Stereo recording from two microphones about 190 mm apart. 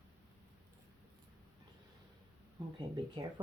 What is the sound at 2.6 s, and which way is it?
Speech, 20° right (ahead or behind).